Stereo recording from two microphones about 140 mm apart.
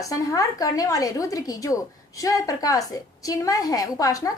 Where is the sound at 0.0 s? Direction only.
25° left (ahead or behind).